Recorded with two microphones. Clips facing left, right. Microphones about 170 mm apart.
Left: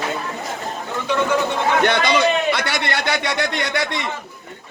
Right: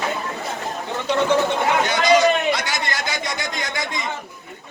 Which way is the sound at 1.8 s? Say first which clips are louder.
Right 3 dB; 60° left (ahead or behind).